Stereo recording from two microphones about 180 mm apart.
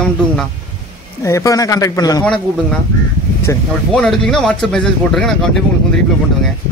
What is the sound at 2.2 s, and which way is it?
Speech, 5° left (ahead or behind).